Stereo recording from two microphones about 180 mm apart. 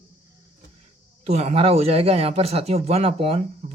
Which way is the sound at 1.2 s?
35° right (ahead or behind).